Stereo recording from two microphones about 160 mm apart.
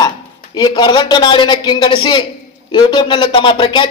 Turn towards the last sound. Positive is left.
turn(degrees=30)  # may be behind; listen again after turning